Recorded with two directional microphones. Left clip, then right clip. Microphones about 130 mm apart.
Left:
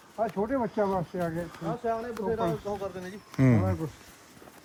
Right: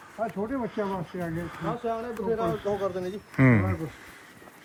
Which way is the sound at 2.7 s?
55° right (ahead or behind).